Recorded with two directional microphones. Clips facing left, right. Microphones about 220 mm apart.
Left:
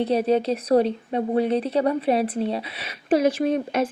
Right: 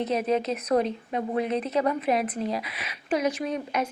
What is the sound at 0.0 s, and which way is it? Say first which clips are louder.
Speech: left 5 dB; 30° left (ahead or behind).